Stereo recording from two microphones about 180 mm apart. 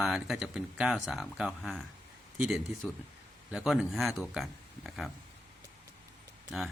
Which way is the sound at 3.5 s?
5° right (ahead or behind).